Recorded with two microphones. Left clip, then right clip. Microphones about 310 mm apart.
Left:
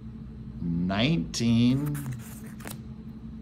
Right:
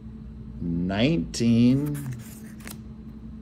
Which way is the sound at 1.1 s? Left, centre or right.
Centre.